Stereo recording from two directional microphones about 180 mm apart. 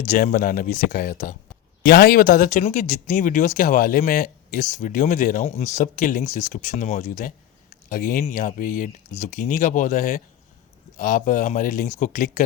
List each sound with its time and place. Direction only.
0.0 s speech: 45° left (ahead or behind)